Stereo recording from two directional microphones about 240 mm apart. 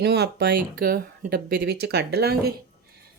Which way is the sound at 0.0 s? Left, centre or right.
Right.